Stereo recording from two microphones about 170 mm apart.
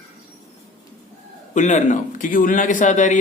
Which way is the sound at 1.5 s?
45° left (ahead or behind).